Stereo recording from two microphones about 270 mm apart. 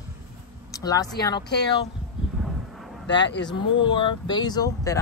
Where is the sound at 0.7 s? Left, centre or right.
Centre.